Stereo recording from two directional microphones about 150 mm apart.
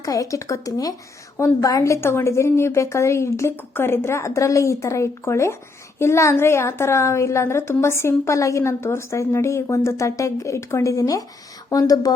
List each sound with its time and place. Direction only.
0.0 s a woman's voice: 25° left (ahead or behind)